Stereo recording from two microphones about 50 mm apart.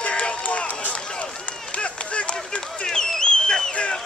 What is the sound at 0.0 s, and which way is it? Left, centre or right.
Run, left.